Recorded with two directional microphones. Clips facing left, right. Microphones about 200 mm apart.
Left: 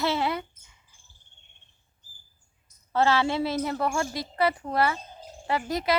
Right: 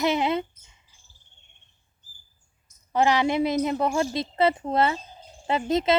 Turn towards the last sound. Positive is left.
turn(degrees=-25)  # may be behind; listen again after turning